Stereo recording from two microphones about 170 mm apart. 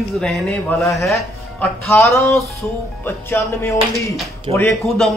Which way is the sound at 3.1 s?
15° left (ahead or behind).